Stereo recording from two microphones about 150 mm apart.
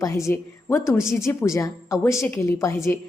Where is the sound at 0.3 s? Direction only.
15° left (ahead or behind).